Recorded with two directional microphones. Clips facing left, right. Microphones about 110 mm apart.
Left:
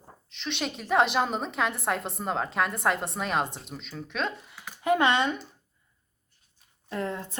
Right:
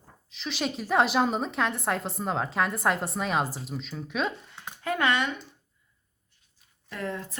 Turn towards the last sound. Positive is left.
turn(degrees=30)  # may be behind; listen again after turning